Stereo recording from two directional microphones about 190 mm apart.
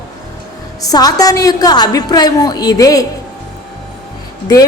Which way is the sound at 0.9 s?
20° left (ahead or behind).